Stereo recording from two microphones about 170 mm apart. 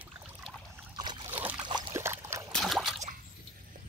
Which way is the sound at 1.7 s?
25° right (ahead or behind).